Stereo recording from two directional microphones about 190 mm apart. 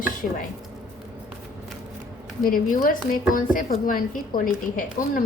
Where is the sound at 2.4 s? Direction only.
50° left (ahead or behind).